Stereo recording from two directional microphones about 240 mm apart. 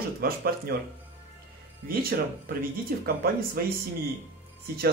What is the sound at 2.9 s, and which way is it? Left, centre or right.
Speech, right.